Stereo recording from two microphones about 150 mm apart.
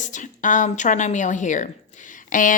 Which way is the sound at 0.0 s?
55° left (ahead or behind).